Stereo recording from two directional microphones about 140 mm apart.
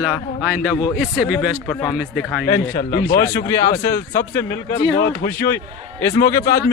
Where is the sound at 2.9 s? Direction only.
90° left.